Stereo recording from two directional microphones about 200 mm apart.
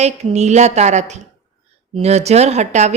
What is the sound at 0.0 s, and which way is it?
A woman's voice, 35° right (ahead or behind).